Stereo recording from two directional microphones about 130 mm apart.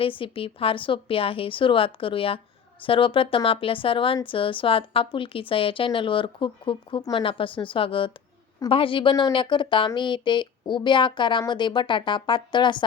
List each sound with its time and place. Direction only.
0.0 s a woman's voice: 45° left (ahead or behind)